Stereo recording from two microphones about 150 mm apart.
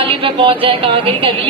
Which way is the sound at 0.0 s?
35° right (ahead or behind).